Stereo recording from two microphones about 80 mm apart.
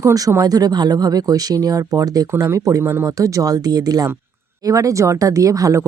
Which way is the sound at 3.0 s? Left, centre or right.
Right.